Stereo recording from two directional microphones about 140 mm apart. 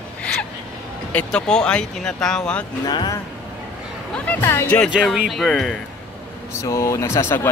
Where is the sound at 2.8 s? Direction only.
30° left (ahead or behind).